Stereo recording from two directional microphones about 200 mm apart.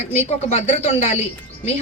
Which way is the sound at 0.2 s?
35° left (ahead or behind).